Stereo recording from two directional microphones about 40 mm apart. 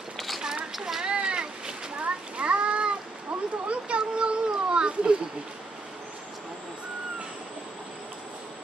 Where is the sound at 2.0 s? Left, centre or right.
Right.